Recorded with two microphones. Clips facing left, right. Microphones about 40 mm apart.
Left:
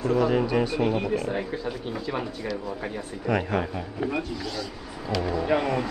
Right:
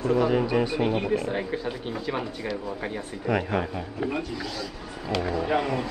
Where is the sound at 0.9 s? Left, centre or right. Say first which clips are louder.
Right 1 dB; right.